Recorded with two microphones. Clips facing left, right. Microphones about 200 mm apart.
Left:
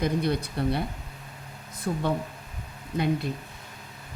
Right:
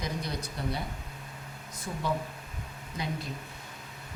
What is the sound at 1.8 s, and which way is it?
Speech, 60° left (ahead or behind).